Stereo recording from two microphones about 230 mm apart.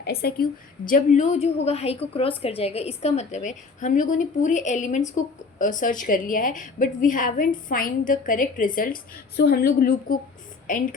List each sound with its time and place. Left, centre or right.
0.0 s a woman's voice: left